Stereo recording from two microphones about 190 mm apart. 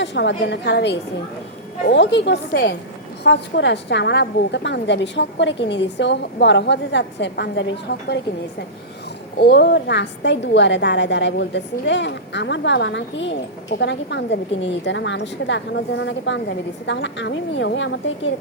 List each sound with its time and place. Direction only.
0.0 s a woman's voice: 65° left (ahead or behind)